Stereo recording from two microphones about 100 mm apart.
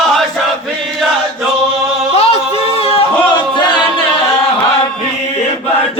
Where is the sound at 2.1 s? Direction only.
90° left.